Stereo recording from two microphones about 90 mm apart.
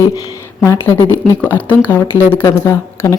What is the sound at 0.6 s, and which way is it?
Speech, 30° left (ahead or behind).